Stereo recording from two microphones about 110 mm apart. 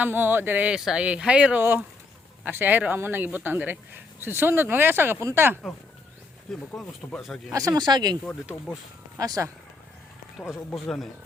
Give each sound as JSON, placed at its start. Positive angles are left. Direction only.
{"t": 0.0, "sound": "speech", "side_deg": -20}
{"t": 6.5, "sound": "speech", "side_deg": 5}
{"t": 7.5, "sound": "speech", "side_deg": -30}